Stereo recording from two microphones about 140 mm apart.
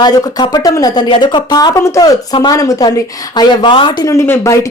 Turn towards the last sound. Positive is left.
turn(degrees=20)  # may be behind; listen again after turning